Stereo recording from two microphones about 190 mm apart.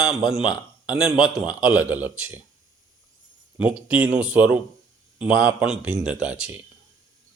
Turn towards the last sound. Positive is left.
turn(degrees=-5)  # may be behind; listen again after turning